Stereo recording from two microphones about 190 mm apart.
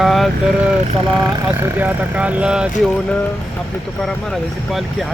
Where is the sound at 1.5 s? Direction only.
10° right (ahead or behind).